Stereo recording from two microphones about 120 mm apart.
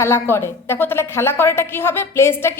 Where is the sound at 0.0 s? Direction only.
20° left (ahead or behind).